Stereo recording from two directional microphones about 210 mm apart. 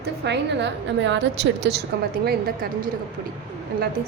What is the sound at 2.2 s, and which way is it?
Speech, 45° right (ahead or behind).